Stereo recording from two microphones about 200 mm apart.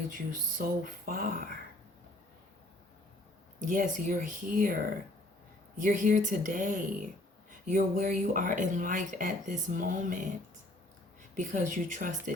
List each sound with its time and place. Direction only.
0.6 s speech: 45° right (ahead or behind)
3.6 s speech: 40° right (ahead or behind)
5.8 s speech: 40° right (ahead or behind)
11.3 s speech: 40° right (ahead or behind)